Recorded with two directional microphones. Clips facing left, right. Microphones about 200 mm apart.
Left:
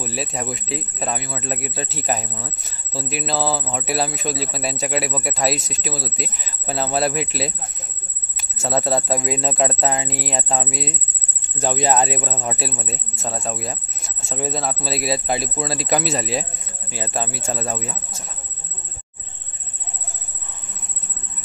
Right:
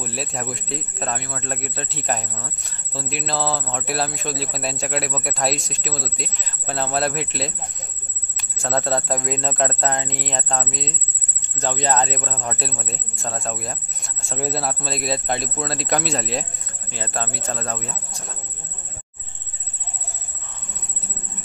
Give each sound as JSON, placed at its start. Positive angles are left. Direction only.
{"t": 0.0, "sound": "speech", "side_deg": 0}
{"t": 8.6, "sound": "speech", "side_deg": 5}